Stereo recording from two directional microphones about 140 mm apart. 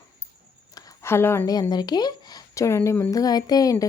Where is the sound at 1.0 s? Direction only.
20° left (ahead or behind).